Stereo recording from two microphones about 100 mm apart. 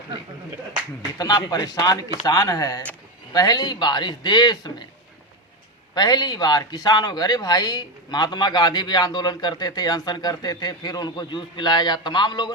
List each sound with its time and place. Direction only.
1.2 s speech: 40° left (ahead or behind)
5.9 s speech: 45° left (ahead or behind)